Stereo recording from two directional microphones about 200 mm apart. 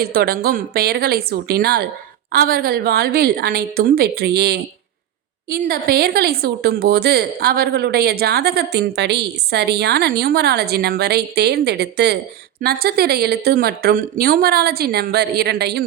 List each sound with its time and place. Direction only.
0.0 s speech: 50° right (ahead or behind)